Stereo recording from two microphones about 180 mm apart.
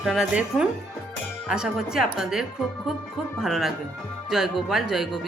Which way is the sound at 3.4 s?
Centre (ahead or behind).